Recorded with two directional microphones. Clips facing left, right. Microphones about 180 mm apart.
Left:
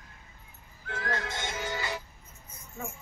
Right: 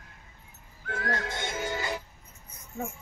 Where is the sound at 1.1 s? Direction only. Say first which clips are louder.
Right 1 dB; 50° right (ahead or behind).